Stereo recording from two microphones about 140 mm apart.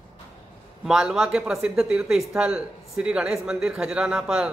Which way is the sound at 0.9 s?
5° right (ahead or behind).